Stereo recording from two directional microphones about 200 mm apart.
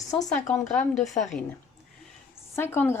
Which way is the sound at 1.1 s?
35° left (ahead or behind).